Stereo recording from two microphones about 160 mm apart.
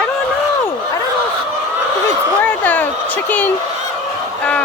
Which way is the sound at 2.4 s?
10° left (ahead or behind).